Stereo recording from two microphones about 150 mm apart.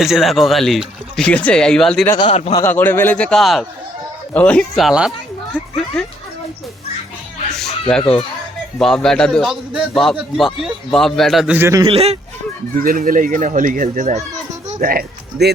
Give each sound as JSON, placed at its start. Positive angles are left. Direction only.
{"t": 0.0, "sound": "a man's voice", "side_deg": 0}
{"t": 7.6, "sound": "a sound", "side_deg": 5}
{"t": 8.0, "sound": "a child's voice", "side_deg": 35}
{"t": 8.8, "sound": "a man's voice", "side_deg": 5}
{"t": 11.5, "sound": "a man's voice", "side_deg": -15}
{"t": 11.8, "sound": "speech", "side_deg": -40}
{"t": 12.8, "sound": "a child's voice", "side_deg": -70}